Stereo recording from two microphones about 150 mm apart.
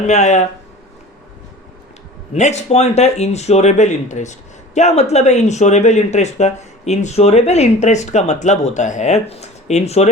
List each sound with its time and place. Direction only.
0.1 s speech: 50° left (ahead or behind)
2.3 s speech: 50° left (ahead or behind)